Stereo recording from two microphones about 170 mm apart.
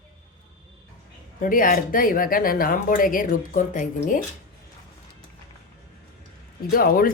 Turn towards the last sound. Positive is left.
turn(degrees=60)  # may be behind; listen again after turning